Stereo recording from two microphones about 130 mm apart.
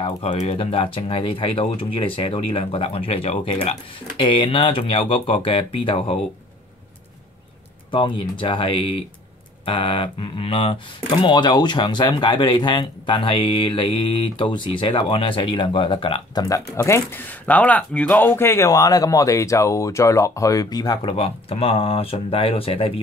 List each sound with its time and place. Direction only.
0.0 s speech: 45° left (ahead or behind)
7.9 s speech: 40° left (ahead or behind)
16.3 s speech: 25° left (ahead or behind); by 22.9 s 45° left (ahead or behind)